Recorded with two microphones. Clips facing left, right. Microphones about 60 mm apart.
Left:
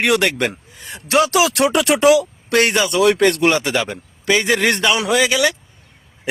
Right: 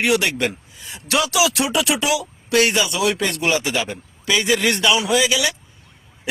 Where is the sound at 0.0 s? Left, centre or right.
Left.